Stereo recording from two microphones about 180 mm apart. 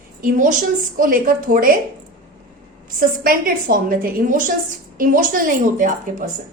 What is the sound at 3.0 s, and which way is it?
Speech, 50° right (ahead or behind).